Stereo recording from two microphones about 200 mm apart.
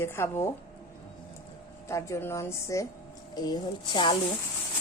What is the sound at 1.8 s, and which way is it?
A woman's voice, 15° left (ahead or behind).